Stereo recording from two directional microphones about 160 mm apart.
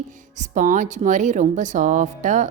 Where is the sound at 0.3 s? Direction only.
50° right (ahead or behind).